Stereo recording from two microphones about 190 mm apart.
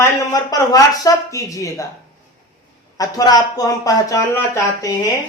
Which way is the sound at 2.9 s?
20° left (ahead or behind).